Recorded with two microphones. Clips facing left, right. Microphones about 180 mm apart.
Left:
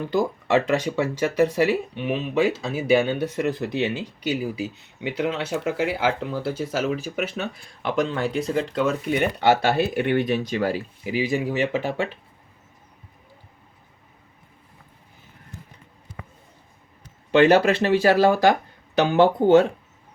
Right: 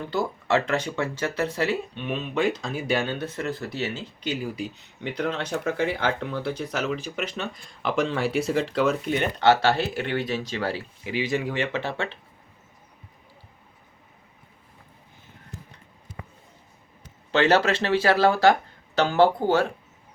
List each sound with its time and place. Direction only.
0.0 s speech: 15° left (ahead or behind); by 9.0 s centre (ahead or behind)
9.0 s speech: 10° left (ahead or behind)
17.3 s speech: 15° left (ahead or behind)